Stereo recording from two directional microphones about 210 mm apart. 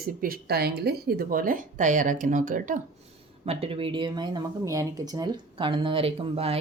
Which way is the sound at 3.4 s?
30° right (ahead or behind).